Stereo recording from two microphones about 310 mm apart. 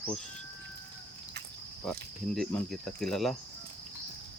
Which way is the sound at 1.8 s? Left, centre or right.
Centre.